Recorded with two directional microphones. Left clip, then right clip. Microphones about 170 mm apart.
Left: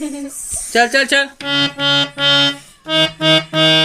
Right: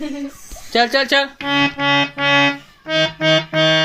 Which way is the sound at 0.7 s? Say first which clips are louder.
Left 2 dB; 5° left (ahead or behind).